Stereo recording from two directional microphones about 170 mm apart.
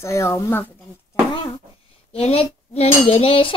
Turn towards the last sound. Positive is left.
turn(degrees=35)  # may be behind; listen again after turning